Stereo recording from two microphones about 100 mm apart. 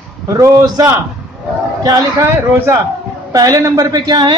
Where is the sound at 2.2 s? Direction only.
25° right (ahead or behind).